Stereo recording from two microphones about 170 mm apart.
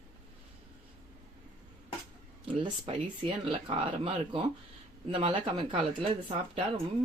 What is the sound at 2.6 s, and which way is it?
Speech, 30° right (ahead or behind).